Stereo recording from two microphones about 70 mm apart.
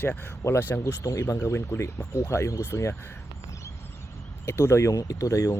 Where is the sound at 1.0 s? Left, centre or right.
Left.